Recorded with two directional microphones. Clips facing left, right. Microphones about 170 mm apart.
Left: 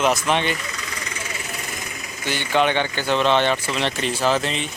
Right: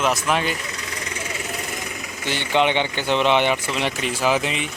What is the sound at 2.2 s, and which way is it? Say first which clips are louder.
Speech: even; 25° right (ahead or behind).